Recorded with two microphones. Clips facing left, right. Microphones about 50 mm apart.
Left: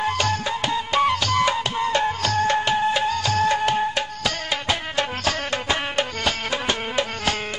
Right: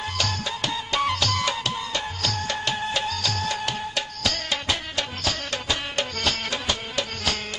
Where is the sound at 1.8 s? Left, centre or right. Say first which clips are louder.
Left 8 dB; left.